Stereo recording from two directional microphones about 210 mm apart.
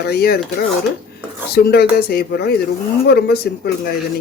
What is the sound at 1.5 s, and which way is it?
A woman's voice, 50° left (ahead or behind).